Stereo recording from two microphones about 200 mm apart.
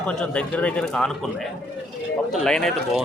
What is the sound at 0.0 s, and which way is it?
A man's voice, 5° left (ahead or behind).